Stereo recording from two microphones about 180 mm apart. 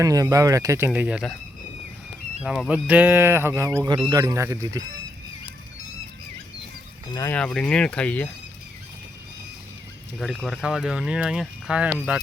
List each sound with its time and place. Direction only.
0.0 s speech: 20° right (ahead or behind)
2.4 s speech: 5° right (ahead or behind)
7.1 s speech: 15° left (ahead or behind)
7.3 s speech: 5° left (ahead or behind)
10.2 s speech: centre (ahead or behind)